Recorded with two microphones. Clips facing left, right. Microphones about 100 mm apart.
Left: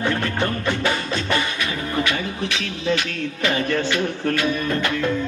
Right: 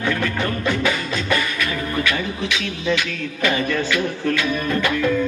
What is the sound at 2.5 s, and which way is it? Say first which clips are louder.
Speech: right 1 dB; 35° left (ahead or behind).